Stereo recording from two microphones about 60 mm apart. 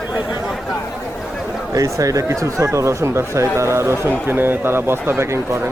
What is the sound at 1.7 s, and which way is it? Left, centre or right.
Speech, right.